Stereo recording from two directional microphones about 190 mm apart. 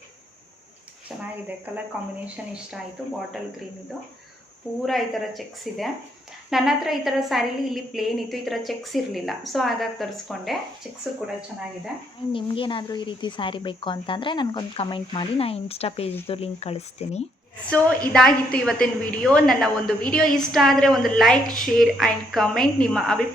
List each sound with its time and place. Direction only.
2.2 s a woman's voice: 5° right (ahead or behind)
4.9 s a woman's voice: centre (ahead or behind)
12.3 s speech: 25° left (ahead or behind)
17.7 s a woman's voice: 5° left (ahead or behind)